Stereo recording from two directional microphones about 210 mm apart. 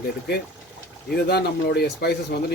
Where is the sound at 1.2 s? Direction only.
50° left (ahead or behind).